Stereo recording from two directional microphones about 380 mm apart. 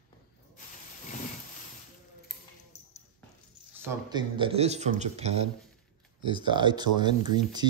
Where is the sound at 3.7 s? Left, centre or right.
Centre.